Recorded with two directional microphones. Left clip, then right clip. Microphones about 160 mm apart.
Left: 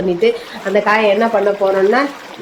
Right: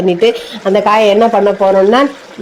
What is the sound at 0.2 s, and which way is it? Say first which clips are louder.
Speech: right 4 dB; 45° right (ahead or behind).